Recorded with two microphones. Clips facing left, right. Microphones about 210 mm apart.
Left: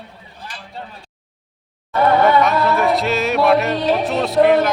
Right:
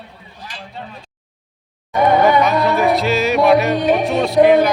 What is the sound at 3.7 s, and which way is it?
Music, 15° right (ahead or behind).